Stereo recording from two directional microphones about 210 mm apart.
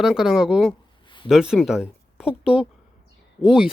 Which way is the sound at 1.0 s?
20° left (ahead or behind).